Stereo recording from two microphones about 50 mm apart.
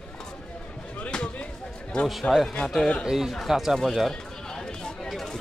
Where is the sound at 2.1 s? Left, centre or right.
Centre.